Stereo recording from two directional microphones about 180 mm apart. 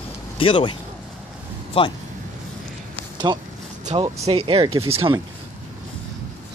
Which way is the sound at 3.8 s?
30° right (ahead or behind).